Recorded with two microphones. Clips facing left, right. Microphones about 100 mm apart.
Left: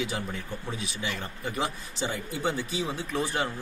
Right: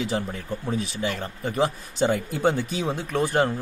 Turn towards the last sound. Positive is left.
turn(degrees=-55)  # may be behind; listen again after turning